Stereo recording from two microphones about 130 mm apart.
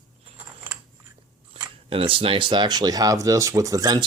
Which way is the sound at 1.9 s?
45° right (ahead or behind).